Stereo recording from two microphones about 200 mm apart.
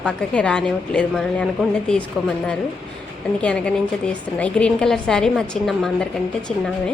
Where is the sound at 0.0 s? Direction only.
5° left (ahead or behind).